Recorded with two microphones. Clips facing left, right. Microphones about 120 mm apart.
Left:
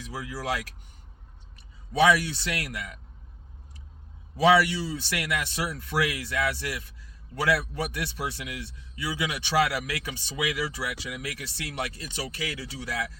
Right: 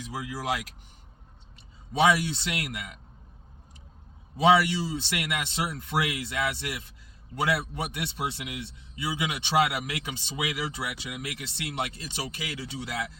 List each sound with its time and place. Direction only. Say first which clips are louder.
0.1 s speech: even; 15° right (ahead or behind)
1.9 s a man's voice: left 1 dB; 25° right (ahead or behind)
4.4 s a man's voice: even; 20° right (ahead or behind)